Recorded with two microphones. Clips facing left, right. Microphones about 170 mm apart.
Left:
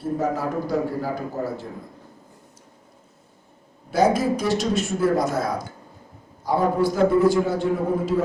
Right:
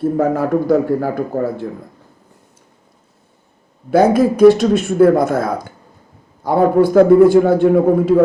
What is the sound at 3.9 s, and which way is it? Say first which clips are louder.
A man's voice: right 7 dB; 55° right (ahead or behind).